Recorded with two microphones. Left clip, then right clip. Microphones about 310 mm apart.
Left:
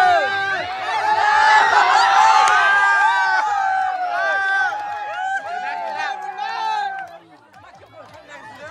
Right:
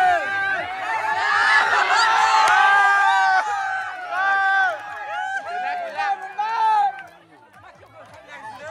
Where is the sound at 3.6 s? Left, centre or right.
Centre.